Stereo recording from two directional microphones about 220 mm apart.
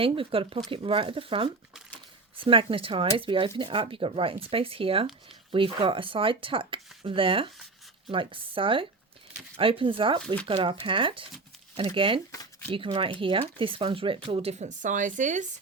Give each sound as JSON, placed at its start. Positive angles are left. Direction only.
{"t": 0.0, "sound": "speech", "side_deg": -25}
{"t": 12.3, "sound": "a sound", "side_deg": 15}
{"t": 12.7, "sound": "speech", "side_deg": -25}